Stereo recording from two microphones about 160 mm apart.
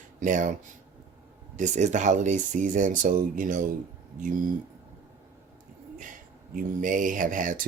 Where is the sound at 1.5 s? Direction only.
50° right (ahead or behind).